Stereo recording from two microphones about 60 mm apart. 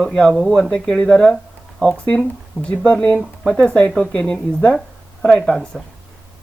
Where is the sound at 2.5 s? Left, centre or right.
Centre.